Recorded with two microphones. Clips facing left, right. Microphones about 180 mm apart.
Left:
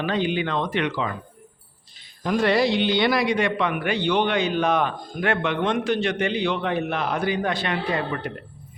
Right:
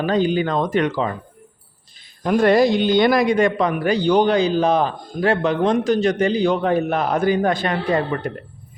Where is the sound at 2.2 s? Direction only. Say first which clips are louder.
Right 5 dB; 50° right (ahead or behind).